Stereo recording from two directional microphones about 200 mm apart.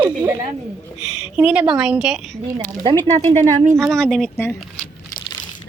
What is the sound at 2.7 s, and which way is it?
Speech, 20° right (ahead or behind).